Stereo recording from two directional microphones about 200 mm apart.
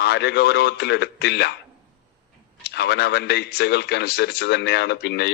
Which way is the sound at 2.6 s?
55° left (ahead or behind).